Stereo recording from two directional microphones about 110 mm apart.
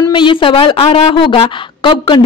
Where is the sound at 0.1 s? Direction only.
50° left (ahead or behind).